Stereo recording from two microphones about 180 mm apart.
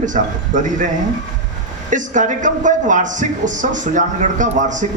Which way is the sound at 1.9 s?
45° right (ahead or behind).